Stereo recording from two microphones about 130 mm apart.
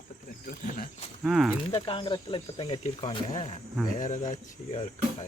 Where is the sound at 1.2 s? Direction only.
5° right (ahead or behind).